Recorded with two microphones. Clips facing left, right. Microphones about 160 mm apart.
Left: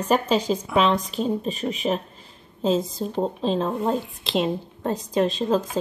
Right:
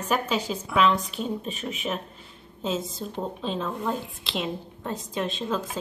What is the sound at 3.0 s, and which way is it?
A woman's voice, 35° left (ahead or behind).